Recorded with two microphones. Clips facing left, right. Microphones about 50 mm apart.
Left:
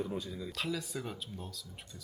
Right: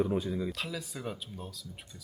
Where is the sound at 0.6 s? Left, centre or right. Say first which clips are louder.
Left 1 dB; centre.